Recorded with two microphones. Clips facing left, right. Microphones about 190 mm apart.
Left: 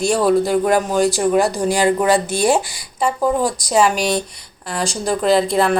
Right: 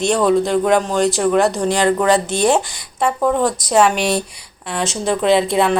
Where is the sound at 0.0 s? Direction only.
5° left (ahead or behind).